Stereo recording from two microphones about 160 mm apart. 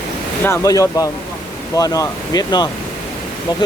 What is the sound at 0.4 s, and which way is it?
Speech, 15° left (ahead or behind).